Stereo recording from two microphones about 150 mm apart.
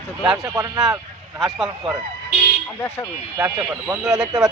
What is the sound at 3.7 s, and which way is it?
Speech, 10° right (ahead or behind).